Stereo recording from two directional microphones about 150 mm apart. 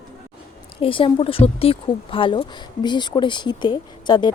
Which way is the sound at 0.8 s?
35° left (ahead or behind).